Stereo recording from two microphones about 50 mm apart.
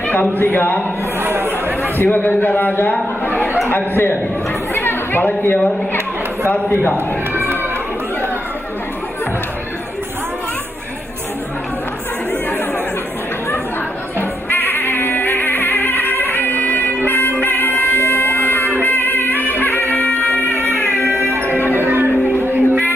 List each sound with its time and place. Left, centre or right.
0.1 s a man's voice: left
1.2 s chatter: right
2.0 s a man's voice: left
4.7 s chatter: left
5.5 s a man's voice: left
6.9 s cat: right
14.2 s music: left
21.3 s music: right